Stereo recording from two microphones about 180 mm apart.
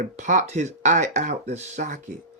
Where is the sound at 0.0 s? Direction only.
45° right (ahead or behind).